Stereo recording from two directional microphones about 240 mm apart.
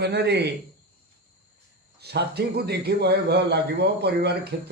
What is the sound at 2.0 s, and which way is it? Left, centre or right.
Speech, right.